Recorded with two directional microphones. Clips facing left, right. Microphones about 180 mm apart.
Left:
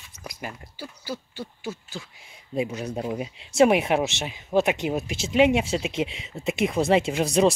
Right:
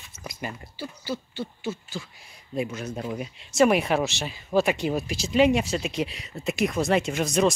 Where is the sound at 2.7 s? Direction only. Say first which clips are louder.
Left 2 dB; 35° left (ahead or behind).